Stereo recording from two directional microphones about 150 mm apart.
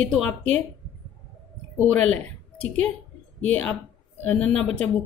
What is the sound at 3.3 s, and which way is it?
Speech, 10° left (ahead or behind).